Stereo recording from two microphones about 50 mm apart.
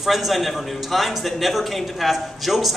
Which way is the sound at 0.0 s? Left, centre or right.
Centre.